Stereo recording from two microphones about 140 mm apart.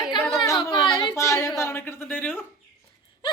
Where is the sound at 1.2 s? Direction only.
20° left (ahead or behind).